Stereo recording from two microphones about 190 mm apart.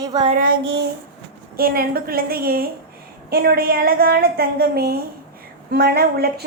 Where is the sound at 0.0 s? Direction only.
20° right (ahead or behind).